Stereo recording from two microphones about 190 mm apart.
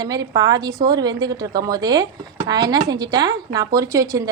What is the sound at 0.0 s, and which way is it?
Speech, 20° right (ahead or behind).